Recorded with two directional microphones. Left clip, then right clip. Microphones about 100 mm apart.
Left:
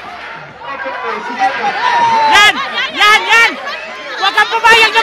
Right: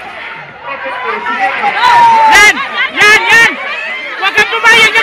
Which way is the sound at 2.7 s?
10° right (ahead or behind).